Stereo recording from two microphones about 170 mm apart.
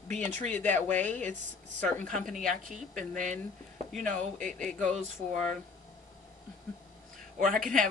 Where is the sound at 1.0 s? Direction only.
10° left (ahead or behind).